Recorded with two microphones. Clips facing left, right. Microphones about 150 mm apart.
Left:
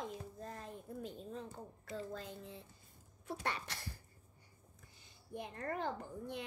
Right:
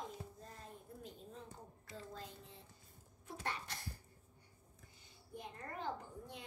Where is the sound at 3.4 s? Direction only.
85° left.